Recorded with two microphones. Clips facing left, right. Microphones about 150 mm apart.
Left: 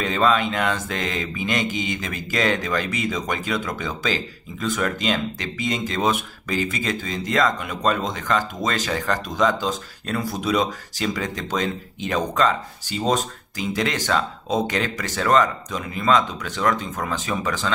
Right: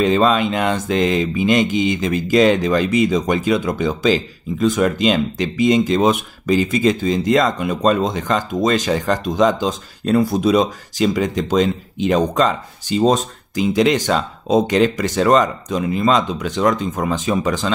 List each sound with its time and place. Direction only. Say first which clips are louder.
0.0 s mantra: right 5 dB; 20° right (ahead or behind)